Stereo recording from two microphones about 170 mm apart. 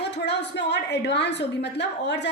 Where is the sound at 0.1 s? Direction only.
85° left.